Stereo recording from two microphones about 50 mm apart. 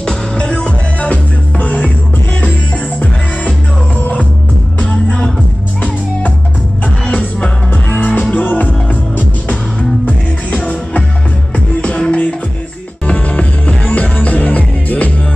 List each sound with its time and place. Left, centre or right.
0.0 s music: centre
4.0 s music: left
6.8 s music: left